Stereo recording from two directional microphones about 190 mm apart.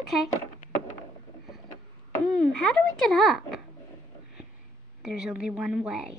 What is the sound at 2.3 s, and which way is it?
A child's voice, centre (ahead or behind).